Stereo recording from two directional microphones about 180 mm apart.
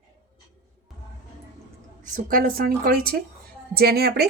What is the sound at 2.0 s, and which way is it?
A woman's voice, 50° right (ahead or behind).